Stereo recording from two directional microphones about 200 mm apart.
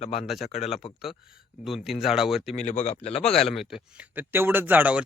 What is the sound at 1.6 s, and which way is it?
Speech, centre (ahead or behind).